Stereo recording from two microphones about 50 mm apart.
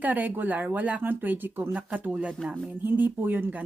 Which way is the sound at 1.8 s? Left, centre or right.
Right.